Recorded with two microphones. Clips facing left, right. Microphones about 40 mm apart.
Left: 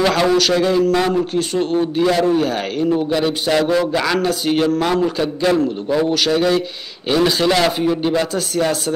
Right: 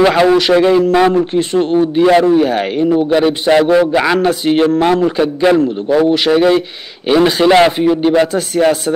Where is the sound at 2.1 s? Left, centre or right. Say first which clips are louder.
Right 7 dB; right.